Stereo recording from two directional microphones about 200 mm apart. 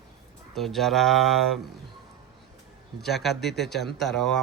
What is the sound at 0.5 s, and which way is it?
Speech, centre (ahead or behind).